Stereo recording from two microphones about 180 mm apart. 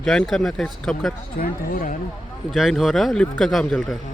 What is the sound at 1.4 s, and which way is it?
Speech, 50° left (ahead or behind).